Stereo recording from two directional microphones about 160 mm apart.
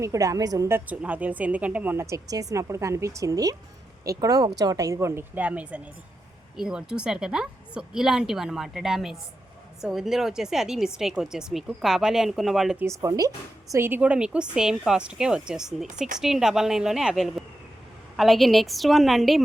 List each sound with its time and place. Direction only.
0.0 s a woman's voice: 20° right (ahead or behind)
0.9 s a woman's voice: 10° right (ahead or behind)
12.8 s a woman's voice: 20° right (ahead or behind); by 19.4 s centre (ahead or behind)